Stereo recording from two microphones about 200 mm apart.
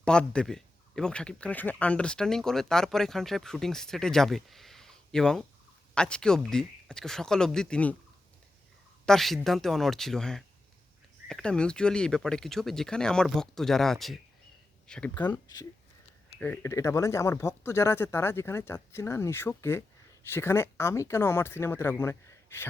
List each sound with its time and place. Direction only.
0.0 s speech: 5° left (ahead or behind)
9.0 s speech: centre (ahead or behind)
15.3 s speech: 20° left (ahead or behind)